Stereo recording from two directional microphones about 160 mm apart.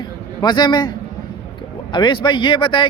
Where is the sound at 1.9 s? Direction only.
30° left (ahead or behind).